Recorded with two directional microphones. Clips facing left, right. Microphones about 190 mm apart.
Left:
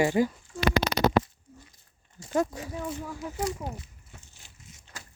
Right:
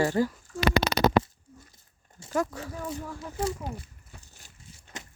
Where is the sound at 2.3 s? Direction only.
20° left (ahead or behind).